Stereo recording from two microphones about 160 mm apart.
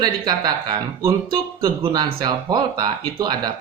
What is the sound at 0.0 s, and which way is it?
Speech, 25° right (ahead or behind).